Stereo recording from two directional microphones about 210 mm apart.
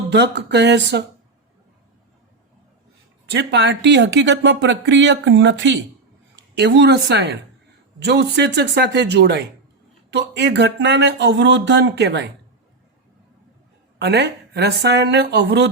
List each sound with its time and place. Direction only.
0.1 s speech: 55° right (ahead or behind)
3.2 s speech: 55° right (ahead or behind)
14.0 s speech: 50° right (ahead or behind)